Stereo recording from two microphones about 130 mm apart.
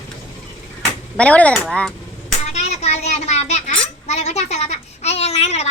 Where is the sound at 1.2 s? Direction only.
10° left (ahead or behind).